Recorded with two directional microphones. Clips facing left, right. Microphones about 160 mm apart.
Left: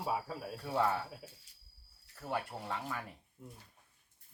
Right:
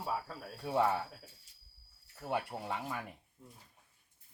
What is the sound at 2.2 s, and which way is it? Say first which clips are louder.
Speech: right 2 dB; 15° right (ahead or behind).